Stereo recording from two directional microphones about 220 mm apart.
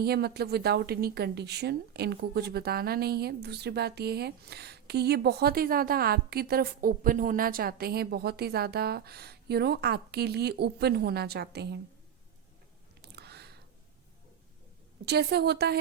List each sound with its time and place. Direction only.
0.0 s a woman's voice: 45° right (ahead or behind)
13.0 s a sound: 50° right (ahead or behind)
15.0 s a woman's voice: 50° right (ahead or behind)